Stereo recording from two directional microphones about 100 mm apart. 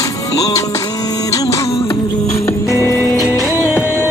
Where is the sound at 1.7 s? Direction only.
65° left (ahead or behind).